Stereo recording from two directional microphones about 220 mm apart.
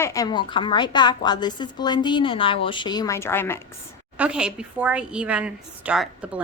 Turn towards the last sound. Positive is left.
turn(degrees=-5)  # may be behind; listen again after turning